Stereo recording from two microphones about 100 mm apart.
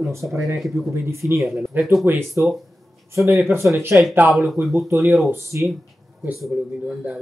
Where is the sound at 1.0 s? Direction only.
30° right (ahead or behind).